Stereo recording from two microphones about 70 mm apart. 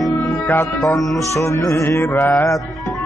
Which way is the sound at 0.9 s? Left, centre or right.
Left.